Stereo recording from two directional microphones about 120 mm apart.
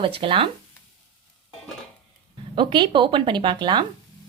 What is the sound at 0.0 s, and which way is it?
Speech, 50° right (ahead or behind).